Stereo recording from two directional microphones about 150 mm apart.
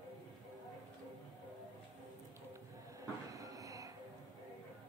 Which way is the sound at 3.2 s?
25° right (ahead or behind).